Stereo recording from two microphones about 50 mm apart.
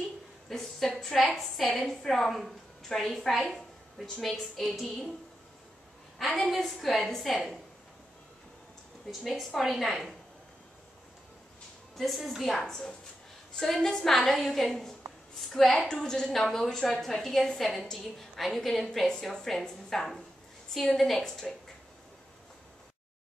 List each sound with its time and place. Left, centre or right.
0.5 s a woman's voice: centre
6.1 s a woman's voice: centre
9.2 s a woman's voice: centre
12.0 s a woman's voice: centre